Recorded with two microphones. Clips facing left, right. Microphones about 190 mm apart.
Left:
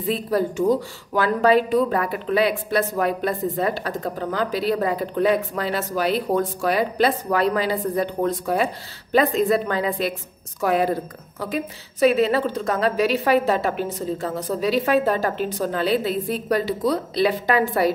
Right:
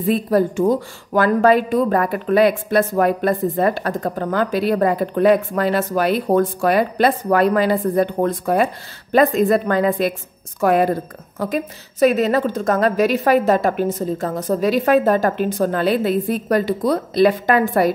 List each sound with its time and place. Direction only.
0.0 s a woman's voice: 50° right (ahead or behind)